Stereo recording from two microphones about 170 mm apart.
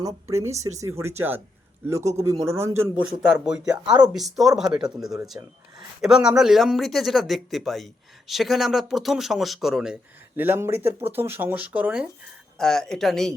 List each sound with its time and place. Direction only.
0.0 s speech: 15° right (ahead or behind)
2.9 s speech: 5° right (ahead or behind)